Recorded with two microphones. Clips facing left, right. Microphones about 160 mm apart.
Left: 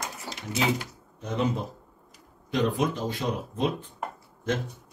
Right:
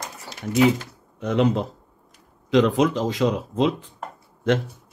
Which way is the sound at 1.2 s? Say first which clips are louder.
Right 7 dB; 75° right (ahead or behind).